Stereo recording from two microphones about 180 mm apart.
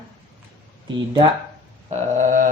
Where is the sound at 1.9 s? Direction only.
40° right (ahead or behind).